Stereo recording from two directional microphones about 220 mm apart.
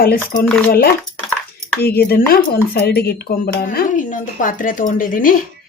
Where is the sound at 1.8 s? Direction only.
45° left (ahead or behind).